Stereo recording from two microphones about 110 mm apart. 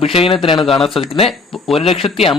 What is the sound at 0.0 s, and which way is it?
Speech, 55° left (ahead or behind).